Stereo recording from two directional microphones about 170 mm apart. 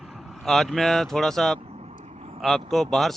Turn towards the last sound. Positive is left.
turn(degrees=0)  # may be behind; listen again after turning